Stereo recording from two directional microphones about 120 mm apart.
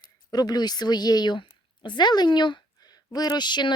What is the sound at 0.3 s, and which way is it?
Speech, 35° left (ahead or behind).